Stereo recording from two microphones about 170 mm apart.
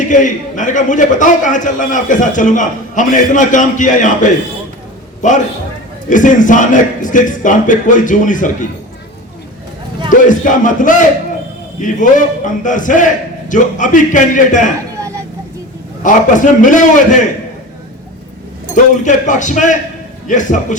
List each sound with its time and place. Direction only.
0.0 s a man's voice: 50° left (ahead or behind)
10.1 s a man's voice: 50° left (ahead or behind)
14.9 s dishes: 20° right (ahead or behind)
16.0 s a man's voice: 50° left (ahead or behind)
19.0 s a man's voice: 45° left (ahead or behind)